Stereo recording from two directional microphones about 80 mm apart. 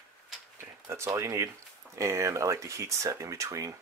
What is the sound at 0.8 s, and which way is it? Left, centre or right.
Speech, right.